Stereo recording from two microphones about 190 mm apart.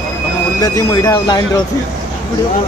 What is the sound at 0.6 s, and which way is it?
Speech, 15° left (ahead or behind).